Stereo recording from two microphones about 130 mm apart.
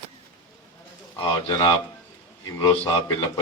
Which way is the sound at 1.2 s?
40° left (ahead or behind).